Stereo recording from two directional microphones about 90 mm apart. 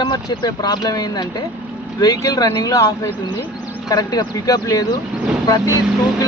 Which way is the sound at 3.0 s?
30° left (ahead or behind).